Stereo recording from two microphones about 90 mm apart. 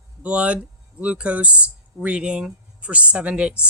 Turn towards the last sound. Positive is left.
turn(degrees=-15)  # may be behind; listen again after turning